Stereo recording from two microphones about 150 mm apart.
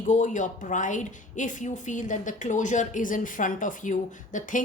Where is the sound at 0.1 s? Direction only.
55° left (ahead or behind).